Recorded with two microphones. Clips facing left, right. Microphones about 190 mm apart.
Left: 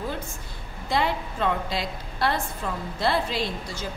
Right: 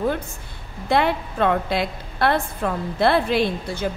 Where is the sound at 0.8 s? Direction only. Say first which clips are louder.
Right 5 dB; 60° right (ahead or behind).